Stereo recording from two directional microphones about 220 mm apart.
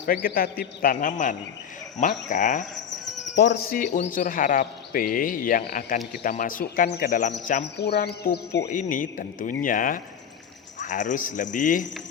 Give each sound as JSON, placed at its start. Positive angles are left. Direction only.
{"t": 0.0, "sound": "a man's voice", "side_deg": 40}
{"t": 3.3, "sound": "speech", "side_deg": 50}
{"t": 3.9, "sound": "a man's voice", "side_deg": 35}
{"t": 7.8, "sound": "speech", "side_deg": 45}
{"t": 8.6, "sound": "a man's voice", "side_deg": 35}